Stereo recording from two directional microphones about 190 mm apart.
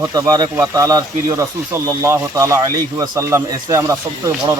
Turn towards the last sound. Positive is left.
turn(degrees=-20)  # may be behind; listen again after turning